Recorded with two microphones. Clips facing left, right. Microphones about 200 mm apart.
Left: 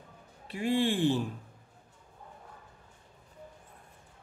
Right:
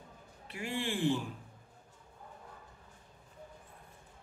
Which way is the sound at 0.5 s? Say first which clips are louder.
Left 9 dB; 35° left (ahead or behind).